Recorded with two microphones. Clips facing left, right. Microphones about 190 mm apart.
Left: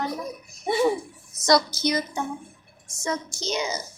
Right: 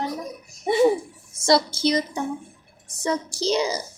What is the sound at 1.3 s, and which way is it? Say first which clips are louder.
A woman's voice: right 1 dB; 30° right (ahead or behind).